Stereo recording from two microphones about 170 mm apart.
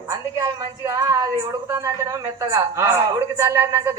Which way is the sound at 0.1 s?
20° right (ahead or behind).